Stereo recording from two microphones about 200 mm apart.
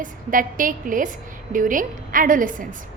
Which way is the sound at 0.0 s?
45° right (ahead or behind).